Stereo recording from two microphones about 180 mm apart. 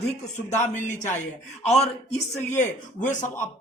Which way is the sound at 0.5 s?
40° left (ahead or behind).